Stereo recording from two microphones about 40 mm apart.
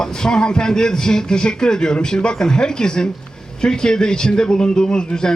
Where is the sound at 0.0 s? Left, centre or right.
Centre.